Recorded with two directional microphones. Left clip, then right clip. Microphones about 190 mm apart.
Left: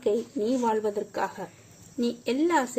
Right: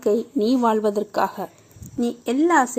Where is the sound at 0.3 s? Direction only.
40° right (ahead or behind).